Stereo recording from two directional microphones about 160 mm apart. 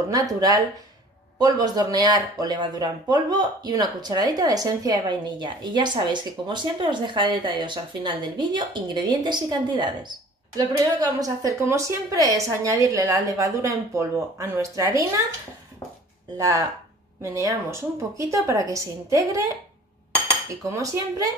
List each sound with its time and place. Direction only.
0.1 s speech: 20° right (ahead or behind)
16.3 s speech: 20° right (ahead or behind)
20.2 s cutlery: 20° right (ahead or behind)